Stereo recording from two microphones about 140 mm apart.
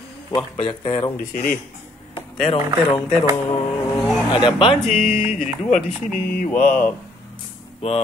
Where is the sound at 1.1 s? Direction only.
90° left.